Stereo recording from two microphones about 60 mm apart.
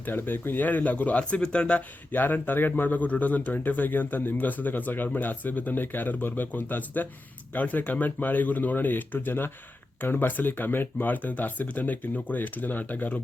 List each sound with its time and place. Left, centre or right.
0.0 s speech: left; by 1.8 s centre
2.1 s speech: left